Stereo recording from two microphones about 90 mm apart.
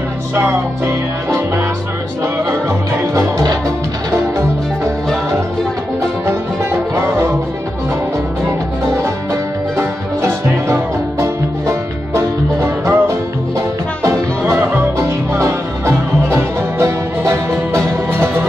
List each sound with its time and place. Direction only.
0.4 s music: 30° right (ahead or behind)
3.0 s music: 35° right (ahead or behind)
8.5 s music: 30° right (ahead or behind)
14.4 s music: 20° right (ahead or behind)
15.0 s music: 35° right (ahead or behind)